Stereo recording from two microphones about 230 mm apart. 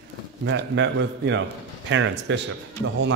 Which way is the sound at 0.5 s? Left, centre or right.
Right.